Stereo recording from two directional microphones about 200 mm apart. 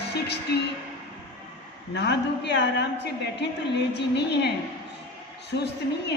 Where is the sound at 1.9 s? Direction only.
60° left (ahead or behind).